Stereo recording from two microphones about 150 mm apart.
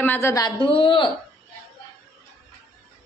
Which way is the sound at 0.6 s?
35° left (ahead or behind).